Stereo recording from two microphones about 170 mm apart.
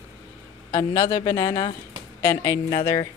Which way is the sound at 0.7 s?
25° left (ahead or behind).